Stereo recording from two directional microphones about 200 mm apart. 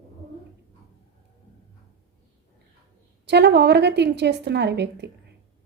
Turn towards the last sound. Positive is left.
turn(degrees=-60)  # may be behind; listen again after turning